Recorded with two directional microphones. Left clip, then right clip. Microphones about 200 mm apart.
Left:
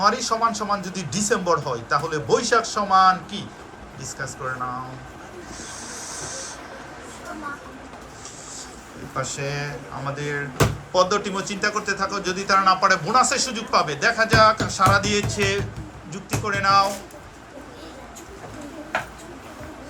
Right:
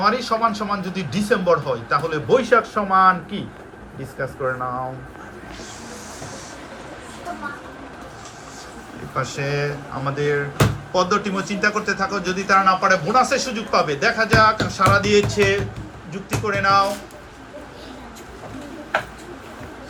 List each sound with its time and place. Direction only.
0.0 s a man's voice: 5° left (ahead or behind)
9.1 s a man's voice: centre (ahead or behind)